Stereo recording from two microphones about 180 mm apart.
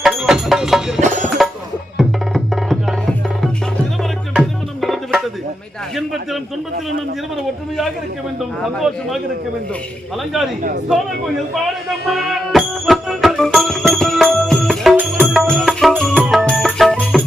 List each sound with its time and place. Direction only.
0.0 s music: centre (ahead or behind)
1.0 s music: 45° right (ahead or behind)
2.0 s music: centre (ahead or behind)
8.4 s speech: centre (ahead or behind)
12.0 s music: centre (ahead or behind)